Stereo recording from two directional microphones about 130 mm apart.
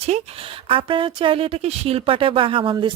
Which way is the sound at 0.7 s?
40° right (ahead or behind).